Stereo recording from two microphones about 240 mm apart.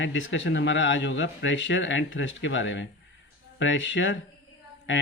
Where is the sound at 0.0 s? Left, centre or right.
Left.